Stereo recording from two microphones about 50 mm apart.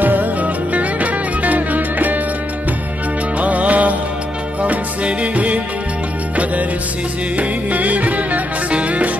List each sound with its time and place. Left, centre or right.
0.0 s music: right
3.3 s music: right
7.3 s music: right